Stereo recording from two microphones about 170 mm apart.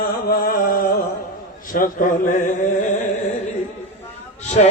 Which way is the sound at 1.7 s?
50° left (ahead or behind).